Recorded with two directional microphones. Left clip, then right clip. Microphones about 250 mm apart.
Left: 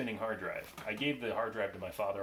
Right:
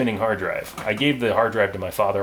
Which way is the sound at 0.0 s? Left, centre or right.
Right.